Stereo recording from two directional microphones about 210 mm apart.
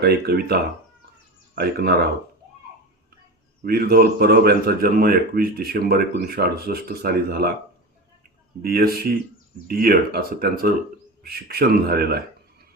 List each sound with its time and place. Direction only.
0.0 s speech: 50° right (ahead or behind)
3.6 s speech: 45° right (ahead or behind)
8.6 s speech: 45° right (ahead or behind)